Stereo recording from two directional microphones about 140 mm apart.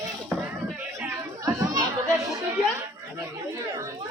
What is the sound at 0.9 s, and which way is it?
Chatter, 20° right (ahead or behind).